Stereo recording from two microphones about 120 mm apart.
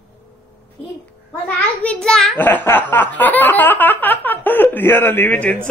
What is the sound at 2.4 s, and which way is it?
Speech, 15° left (ahead or behind).